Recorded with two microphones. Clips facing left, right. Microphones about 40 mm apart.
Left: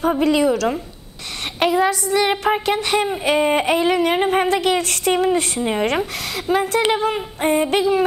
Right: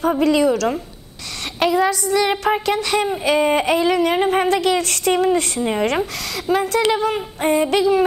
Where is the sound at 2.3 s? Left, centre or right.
Centre.